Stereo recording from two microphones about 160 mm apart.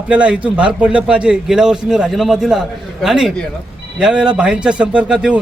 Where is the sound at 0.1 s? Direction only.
5° right (ahead or behind).